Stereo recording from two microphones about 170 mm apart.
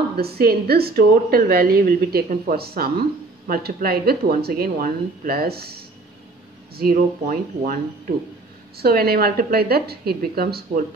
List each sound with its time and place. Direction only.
0.2 s speech: 65° right (ahead or behind)